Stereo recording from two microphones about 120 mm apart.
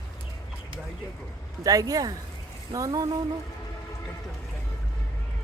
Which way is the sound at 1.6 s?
30° right (ahead or behind).